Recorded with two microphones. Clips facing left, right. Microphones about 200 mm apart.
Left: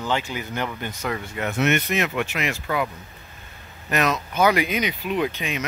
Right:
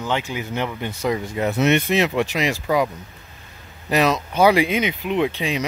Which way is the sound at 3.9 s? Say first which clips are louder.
Right 4 dB; 30° right (ahead or behind).